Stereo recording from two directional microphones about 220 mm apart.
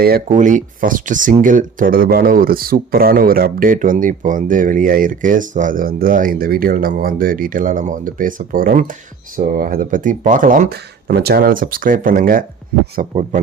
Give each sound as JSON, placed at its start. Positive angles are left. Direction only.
{"t": 0.0, "sound": "speech", "side_deg": -40}